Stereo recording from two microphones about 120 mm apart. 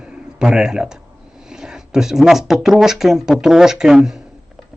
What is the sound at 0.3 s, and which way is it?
Speech, 5° right (ahead or behind).